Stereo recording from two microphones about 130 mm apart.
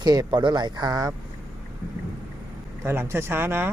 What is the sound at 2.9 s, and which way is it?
Speech, 20° right (ahead or behind).